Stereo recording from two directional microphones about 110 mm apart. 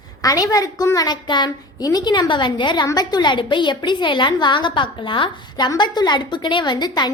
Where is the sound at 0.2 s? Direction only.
30° left (ahead or behind).